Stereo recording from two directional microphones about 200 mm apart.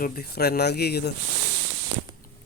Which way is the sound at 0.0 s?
50° left (ahead or behind).